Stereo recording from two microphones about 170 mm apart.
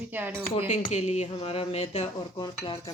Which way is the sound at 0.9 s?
40° left (ahead or behind).